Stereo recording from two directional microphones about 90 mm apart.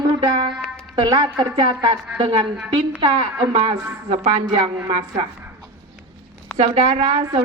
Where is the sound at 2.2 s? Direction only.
85° right.